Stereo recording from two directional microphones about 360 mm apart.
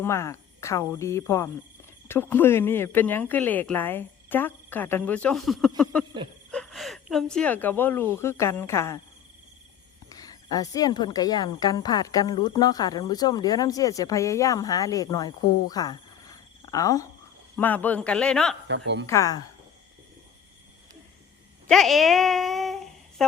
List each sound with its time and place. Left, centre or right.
0.0 s speech: centre
10.1 s speech: centre
18.7 s a woman's voice: right
19.0 s speech: centre
21.7 s a sound: centre